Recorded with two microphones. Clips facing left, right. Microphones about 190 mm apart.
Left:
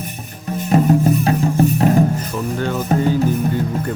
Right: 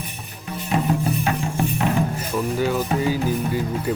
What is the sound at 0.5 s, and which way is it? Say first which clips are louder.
Music: left 7 dB; 45° left (ahead or behind).